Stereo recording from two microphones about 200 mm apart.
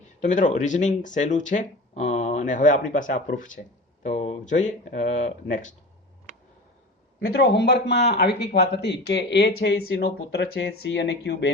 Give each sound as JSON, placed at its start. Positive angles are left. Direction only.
{"t": 0.2, "sound": "speech", "side_deg": 40}
{"t": 7.3, "sound": "speech", "side_deg": 55}